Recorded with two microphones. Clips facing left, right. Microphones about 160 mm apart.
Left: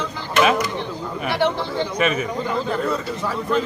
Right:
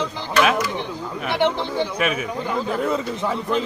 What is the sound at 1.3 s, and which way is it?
Speech, 20° right (ahead or behind).